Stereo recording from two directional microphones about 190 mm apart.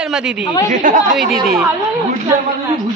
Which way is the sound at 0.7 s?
45° right (ahead or behind).